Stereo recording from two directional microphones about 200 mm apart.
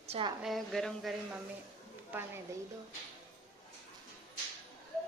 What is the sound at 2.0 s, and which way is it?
Speech, 10° right (ahead or behind).